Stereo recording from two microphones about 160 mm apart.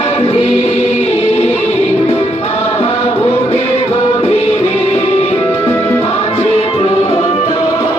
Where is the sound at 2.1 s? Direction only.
40° left (ahead or behind).